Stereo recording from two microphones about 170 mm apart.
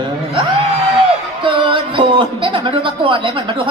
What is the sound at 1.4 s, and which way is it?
Speech, 30° right (ahead or behind).